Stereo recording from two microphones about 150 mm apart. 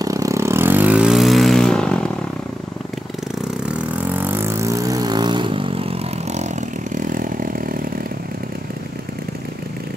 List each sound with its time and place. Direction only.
0.0 s vehicle: 20° right (ahead or behind); by 2.1 s 5° left (ahead or behind)
3.7 s vehicle: 10° right (ahead or behind); by 7.7 s 65° right (ahead or behind)